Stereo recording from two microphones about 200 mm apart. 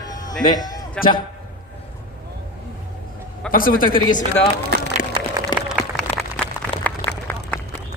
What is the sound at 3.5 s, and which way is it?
Speech, 45° left (ahead or behind).